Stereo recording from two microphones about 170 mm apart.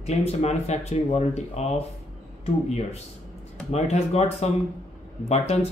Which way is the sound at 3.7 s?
40° left (ahead or behind).